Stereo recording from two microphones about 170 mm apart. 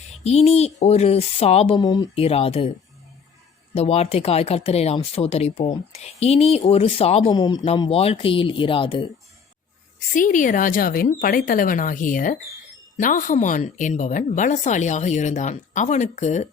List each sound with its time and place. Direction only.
0.2 s speech: 40° left (ahead or behind)
2.2 s speech: 35° left (ahead or behind)
3.8 s speech: 35° left (ahead or behind)
7.8 s speech: 35° left (ahead or behind)
10.2 s a woman's voice: 50° left (ahead or behind)